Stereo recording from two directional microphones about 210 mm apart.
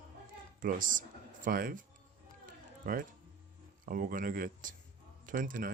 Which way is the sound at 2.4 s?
40° right (ahead or behind).